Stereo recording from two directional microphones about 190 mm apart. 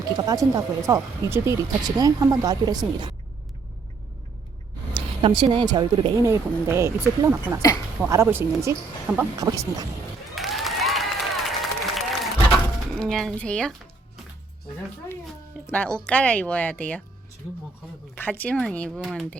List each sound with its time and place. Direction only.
0.0 s a woman's voice: 20° right (ahead or behind)
4.9 s a woman's voice: 25° right (ahead or behind)
10.3 s applause: centre (ahead or behind)
13.0 s speech: 5° left (ahead or behind)
15.7 s speech: 5° left (ahead or behind)
18.1 s speech: 10° left (ahead or behind)